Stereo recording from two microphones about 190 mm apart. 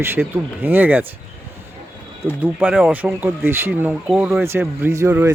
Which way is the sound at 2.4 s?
10° right (ahead or behind).